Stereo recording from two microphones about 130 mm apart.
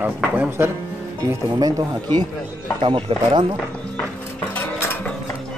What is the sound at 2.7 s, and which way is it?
Speech, 40° right (ahead or behind).